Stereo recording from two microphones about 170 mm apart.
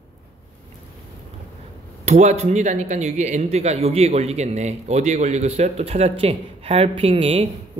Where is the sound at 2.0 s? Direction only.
40° right (ahead or behind).